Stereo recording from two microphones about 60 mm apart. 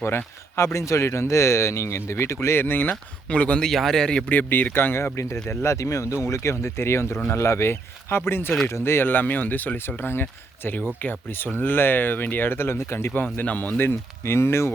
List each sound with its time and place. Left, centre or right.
0.5 s a man's voice: left
3.2 s speech: left
3.6 s a man's voice: centre
4.3 s speech: left
5.1 s a man's voice: left
13.1 s speech: left